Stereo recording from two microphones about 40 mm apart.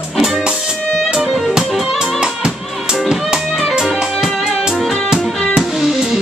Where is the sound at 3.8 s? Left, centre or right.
Centre.